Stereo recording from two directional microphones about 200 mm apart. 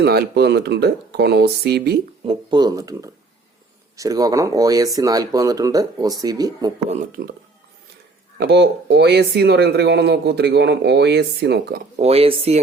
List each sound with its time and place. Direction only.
0.0 s speech: 55° right (ahead or behind)
2.2 s speech: 25° right (ahead or behind)
6.8 s speech: 35° right (ahead or behind)
8.4 s speech: 55° right (ahead or behind)
11.9 s speech: 30° right (ahead or behind)